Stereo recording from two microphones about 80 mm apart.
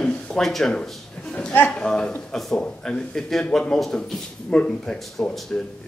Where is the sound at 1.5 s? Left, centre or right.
Left.